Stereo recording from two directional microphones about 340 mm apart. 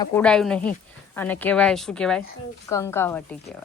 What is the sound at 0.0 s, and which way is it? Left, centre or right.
A woman's voice, centre.